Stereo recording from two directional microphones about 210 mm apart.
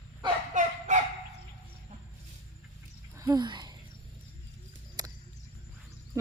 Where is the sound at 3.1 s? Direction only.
15° right (ahead or behind).